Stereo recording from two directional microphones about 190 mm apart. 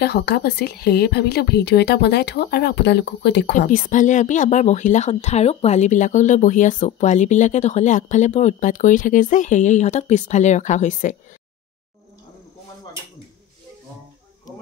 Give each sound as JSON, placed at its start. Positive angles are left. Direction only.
{"t": 0.0, "sound": "speech", "side_deg": 60}
{"t": 3.5, "sound": "speech", "side_deg": 45}